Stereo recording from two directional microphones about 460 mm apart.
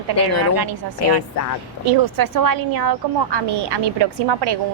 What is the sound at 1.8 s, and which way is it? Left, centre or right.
A woman's voice, right.